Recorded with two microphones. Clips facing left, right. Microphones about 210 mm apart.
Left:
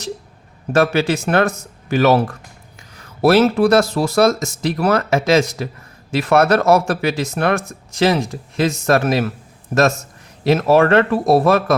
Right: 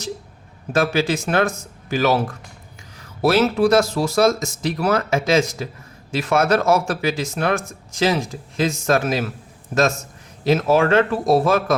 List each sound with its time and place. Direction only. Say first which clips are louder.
0.7 s speech: left 3 dB; 60° left (ahead or behind)
10.4 s speech: left 3 dB; 65° left (ahead or behind)